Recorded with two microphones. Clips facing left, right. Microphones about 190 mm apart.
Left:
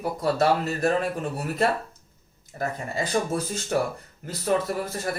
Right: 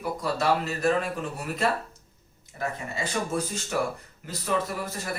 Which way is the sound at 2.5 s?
40° left (ahead or behind).